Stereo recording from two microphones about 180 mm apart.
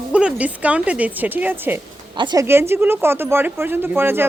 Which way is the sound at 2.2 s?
25° right (ahead or behind).